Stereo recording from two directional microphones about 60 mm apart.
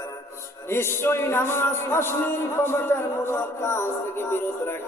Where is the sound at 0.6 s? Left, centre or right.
Left.